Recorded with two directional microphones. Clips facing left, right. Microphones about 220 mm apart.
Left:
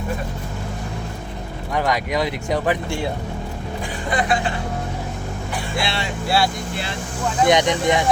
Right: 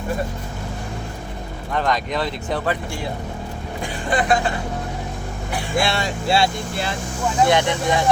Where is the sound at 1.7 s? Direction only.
10° left (ahead or behind).